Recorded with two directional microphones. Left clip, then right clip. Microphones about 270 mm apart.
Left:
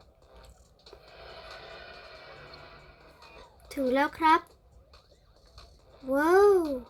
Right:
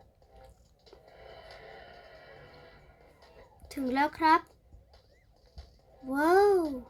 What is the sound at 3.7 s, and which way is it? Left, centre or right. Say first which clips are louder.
Speech: left 3 dB; centre.